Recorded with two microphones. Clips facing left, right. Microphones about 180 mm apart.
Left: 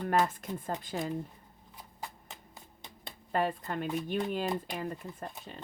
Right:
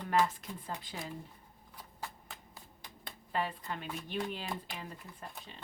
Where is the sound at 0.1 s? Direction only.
50° left (ahead or behind).